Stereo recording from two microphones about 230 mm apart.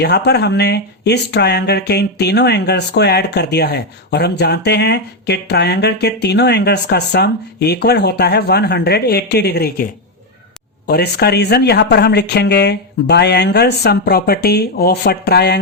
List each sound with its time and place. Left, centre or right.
0.0 s speech: left
10.8 s speech: left